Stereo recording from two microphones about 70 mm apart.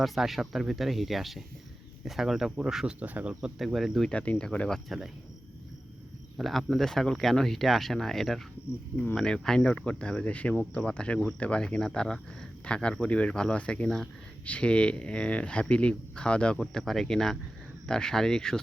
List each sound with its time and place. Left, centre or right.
0.0 s speech: centre
3.0 s speech: right
3.6 s speech: centre
4.1 s speech: centre
4.9 s speech: centre
6.3 s speech: centre